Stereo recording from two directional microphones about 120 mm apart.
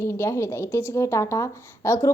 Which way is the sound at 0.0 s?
20° left (ahead or behind).